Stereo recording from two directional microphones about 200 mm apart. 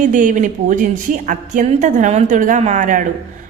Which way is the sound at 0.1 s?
40° right (ahead or behind).